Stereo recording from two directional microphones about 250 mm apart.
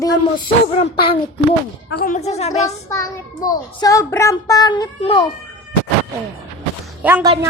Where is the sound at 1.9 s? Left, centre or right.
Left.